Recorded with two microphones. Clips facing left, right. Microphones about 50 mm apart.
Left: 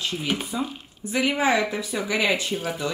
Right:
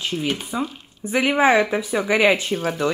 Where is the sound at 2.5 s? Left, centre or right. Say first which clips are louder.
Right 4 dB; centre.